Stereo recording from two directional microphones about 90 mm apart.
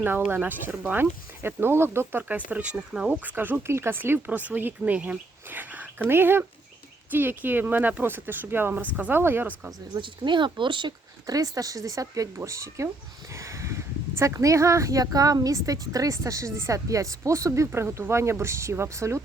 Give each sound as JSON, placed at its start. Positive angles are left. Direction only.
{"t": 0.3, "sound": "speech", "side_deg": -20}
{"t": 2.2, "sound": "speech", "side_deg": -15}
{"t": 10.0, "sound": "speech", "side_deg": -60}
{"t": 11.3, "sound": "speech", "side_deg": -40}